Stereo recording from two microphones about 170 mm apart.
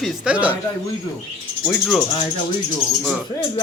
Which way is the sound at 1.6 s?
10° left (ahead or behind).